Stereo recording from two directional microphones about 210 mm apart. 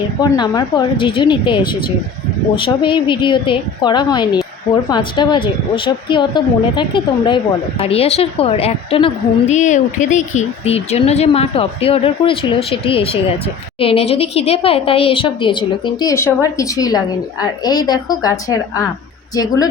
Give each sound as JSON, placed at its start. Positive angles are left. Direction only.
{"t": 0.2, "sound": "a woman's voice", "side_deg": 20}